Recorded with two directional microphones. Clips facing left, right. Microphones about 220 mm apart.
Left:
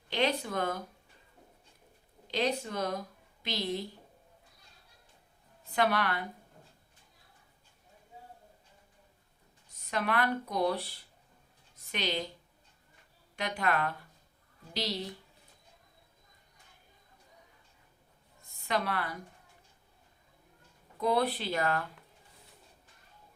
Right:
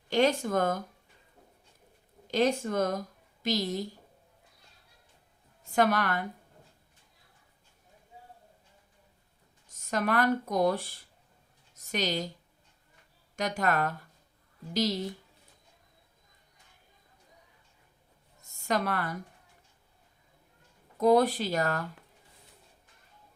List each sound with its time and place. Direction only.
0.1 s speech: 45° right (ahead or behind)
2.2 s a woman's voice: 45° right (ahead or behind)
5.7 s speech: 45° right (ahead or behind)
9.7 s speech: 45° right (ahead or behind)
13.3 s speech: 45° right (ahead or behind)
18.4 s a woman's voice: 45° right (ahead or behind)
21.0 s speech: 45° right (ahead or behind)